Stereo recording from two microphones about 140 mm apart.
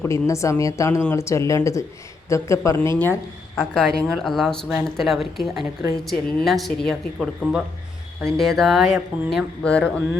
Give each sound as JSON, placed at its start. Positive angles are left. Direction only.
{"t": 0.0, "sound": "speech", "side_deg": 20}
{"t": 3.8, "sound": "speech", "side_deg": 0}